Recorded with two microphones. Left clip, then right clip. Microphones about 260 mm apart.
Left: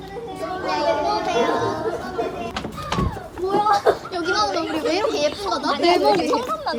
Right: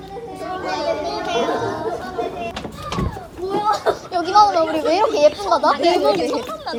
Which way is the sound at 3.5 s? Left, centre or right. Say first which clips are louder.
Left 1 dB; centre.